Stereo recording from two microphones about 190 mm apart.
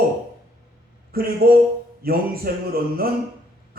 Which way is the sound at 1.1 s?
55° right (ahead or behind).